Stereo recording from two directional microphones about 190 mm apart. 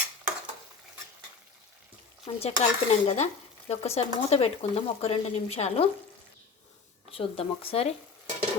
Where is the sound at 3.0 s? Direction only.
35° left (ahead or behind).